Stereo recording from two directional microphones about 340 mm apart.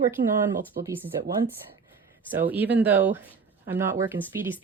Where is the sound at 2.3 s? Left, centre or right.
Centre.